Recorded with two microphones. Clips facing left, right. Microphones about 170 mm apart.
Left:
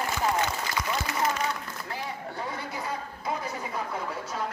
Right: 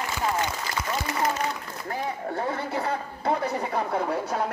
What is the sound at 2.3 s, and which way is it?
A woman's voice, 60° right (ahead or behind).